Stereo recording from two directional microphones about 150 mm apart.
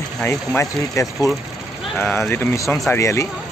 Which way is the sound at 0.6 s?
20° left (ahead or behind).